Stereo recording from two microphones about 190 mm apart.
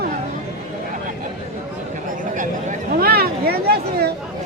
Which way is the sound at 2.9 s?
50° right (ahead or behind).